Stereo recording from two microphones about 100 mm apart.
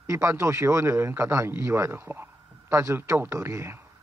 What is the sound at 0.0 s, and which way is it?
A man's voice, 30° right (ahead or behind).